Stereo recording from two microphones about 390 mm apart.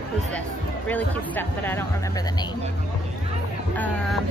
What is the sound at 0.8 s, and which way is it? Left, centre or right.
A woman's voice, centre.